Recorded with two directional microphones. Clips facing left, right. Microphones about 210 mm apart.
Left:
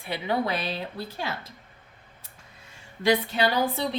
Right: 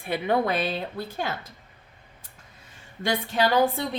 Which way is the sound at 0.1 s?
50° right (ahead or behind).